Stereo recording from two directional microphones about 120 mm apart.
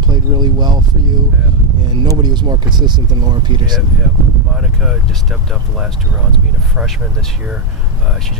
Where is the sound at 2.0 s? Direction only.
35° right (ahead or behind).